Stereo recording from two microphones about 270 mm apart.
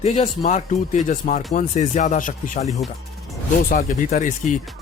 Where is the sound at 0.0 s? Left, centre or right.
Left.